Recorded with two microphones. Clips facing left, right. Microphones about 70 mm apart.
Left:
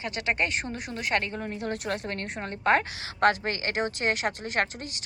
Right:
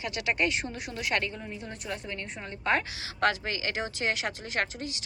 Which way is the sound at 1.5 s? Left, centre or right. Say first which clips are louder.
Left 7 dB; left.